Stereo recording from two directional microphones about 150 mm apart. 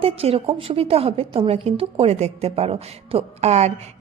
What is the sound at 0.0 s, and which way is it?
A woman's voice, 40° right (ahead or behind).